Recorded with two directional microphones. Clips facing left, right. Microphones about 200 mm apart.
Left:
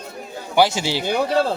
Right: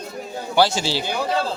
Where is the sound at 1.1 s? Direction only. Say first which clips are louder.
Left 7 dB; 55° left (ahead or behind).